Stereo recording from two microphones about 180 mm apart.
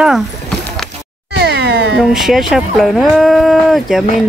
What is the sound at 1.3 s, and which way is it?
Cat, 70° right (ahead or behind).